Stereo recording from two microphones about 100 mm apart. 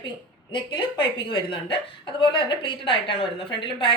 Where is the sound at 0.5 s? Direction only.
55° left (ahead or behind).